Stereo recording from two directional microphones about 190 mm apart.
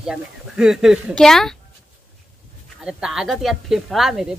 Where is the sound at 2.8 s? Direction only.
5° right (ahead or behind).